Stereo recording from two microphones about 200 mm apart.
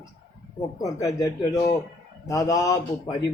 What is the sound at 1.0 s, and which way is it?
Speech, 15° left (ahead or behind).